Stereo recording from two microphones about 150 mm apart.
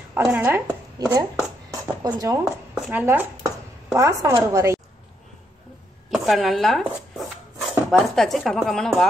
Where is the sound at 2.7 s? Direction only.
10° right (ahead or behind).